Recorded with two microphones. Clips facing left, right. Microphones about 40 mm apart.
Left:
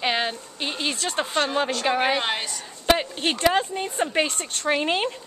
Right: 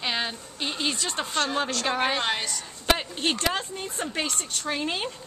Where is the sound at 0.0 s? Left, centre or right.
Centre.